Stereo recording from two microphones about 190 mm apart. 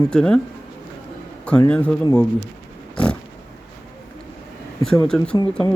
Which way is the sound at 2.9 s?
5° left (ahead or behind).